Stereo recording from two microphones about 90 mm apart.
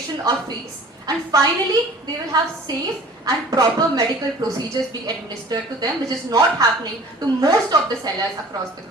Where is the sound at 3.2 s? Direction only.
45° right (ahead or behind).